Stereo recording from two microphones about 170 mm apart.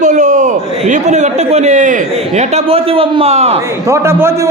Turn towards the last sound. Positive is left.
turn(degrees=-15)  # may be behind; listen again after turning